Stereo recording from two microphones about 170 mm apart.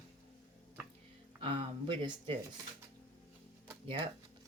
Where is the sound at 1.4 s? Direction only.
30° right (ahead or behind).